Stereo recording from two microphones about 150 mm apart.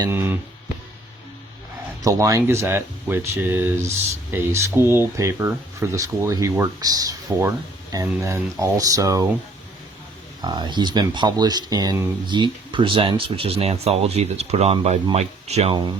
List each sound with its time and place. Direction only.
0.1 s speech: 15° right (ahead or behind)
2.0 s speech: 20° right (ahead or behind)
10.4 s speech: 30° right (ahead or behind)
12.3 s speech: 35° right (ahead or behind)